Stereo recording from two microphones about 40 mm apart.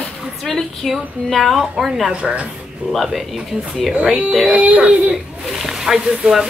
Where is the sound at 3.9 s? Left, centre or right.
Right.